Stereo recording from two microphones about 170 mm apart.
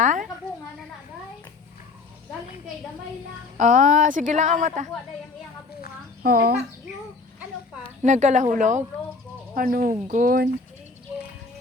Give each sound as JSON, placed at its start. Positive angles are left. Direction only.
{"t": 0.0, "sound": "a sound", "side_deg": -50}
{"t": 3.6, "sound": "a woman's voice", "side_deg": -50}
{"t": 6.2, "sound": "speech", "side_deg": -65}
{"t": 8.0, "sound": "a woman's voice", "side_deg": -45}
{"t": 9.6, "sound": "speech", "side_deg": -60}